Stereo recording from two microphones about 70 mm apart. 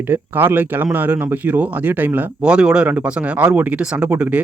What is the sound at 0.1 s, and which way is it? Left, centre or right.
Speech, right.